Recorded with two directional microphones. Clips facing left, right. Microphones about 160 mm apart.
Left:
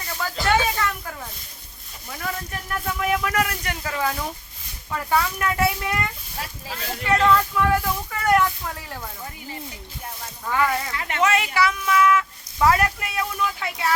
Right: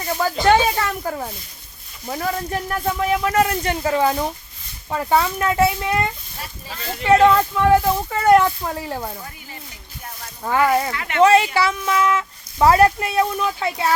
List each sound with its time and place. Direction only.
0.0 s speech: 35° right (ahead or behind)
10.4 s speech: 35° right (ahead or behind)